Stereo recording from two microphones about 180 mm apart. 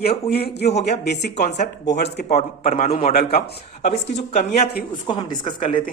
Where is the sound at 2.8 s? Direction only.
55° left (ahead or behind).